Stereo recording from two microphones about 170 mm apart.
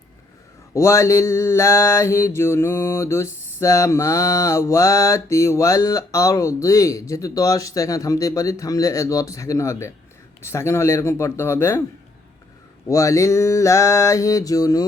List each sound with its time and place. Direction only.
0.7 s mantra: 15° left (ahead or behind)
12.9 s mantra: 20° left (ahead or behind)